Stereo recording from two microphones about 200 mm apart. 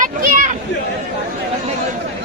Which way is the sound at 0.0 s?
40° right (ahead or behind).